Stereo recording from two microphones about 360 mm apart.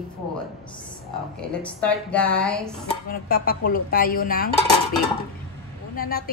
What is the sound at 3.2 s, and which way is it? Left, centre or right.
A woman's voice, left.